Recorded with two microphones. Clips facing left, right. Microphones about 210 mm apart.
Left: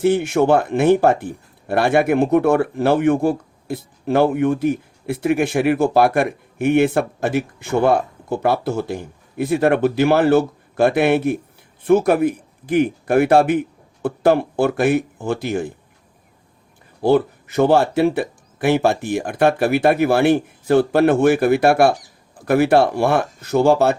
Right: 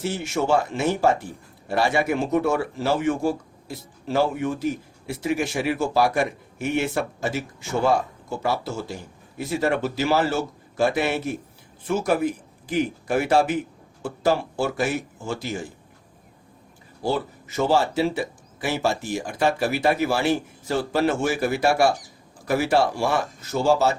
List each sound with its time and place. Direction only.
0.0 s speech: 55° left (ahead or behind)
17.0 s speech: 60° left (ahead or behind)